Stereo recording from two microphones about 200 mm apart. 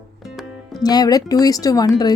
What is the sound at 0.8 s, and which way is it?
A woman's voice, 20° left (ahead or behind).